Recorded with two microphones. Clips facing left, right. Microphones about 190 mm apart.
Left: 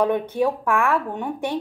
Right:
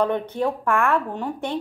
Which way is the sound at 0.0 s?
10° left (ahead or behind).